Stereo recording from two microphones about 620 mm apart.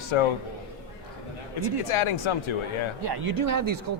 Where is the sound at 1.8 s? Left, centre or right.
Left.